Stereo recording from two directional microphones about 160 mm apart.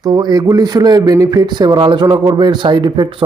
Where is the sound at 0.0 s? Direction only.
25° right (ahead or behind).